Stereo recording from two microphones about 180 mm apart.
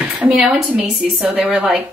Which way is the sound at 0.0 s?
5° right (ahead or behind).